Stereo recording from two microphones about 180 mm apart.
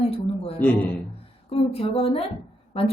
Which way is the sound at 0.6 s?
10° left (ahead or behind).